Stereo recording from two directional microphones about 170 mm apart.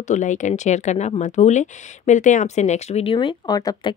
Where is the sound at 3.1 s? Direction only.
25° left (ahead or behind).